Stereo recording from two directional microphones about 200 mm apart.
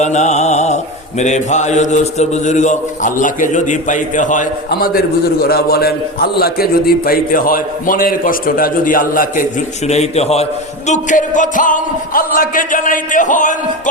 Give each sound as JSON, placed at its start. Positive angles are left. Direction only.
{"t": 0.0, "sound": "mantra", "side_deg": 35}
{"t": 1.2, "sound": "a man's voice", "side_deg": 35}